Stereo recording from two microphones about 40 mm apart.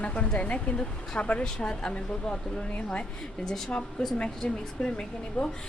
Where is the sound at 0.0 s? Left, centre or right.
Left.